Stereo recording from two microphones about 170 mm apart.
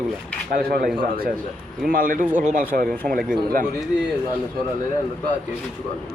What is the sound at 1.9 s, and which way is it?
Speech, 55° right (ahead or behind).